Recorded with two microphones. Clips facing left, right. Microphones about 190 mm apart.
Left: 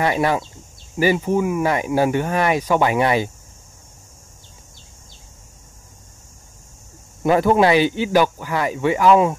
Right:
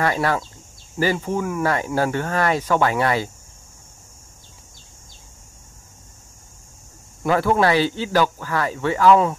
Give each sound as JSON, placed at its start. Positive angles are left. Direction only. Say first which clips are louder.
{"t": 0.0, "sound": "speech", "louder": "left 2 dB", "side_deg": 15}
{"t": 7.2, "sound": "speech", "louder": "left 3 dB", "side_deg": 20}